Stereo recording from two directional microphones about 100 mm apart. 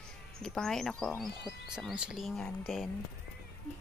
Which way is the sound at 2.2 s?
5° left (ahead or behind).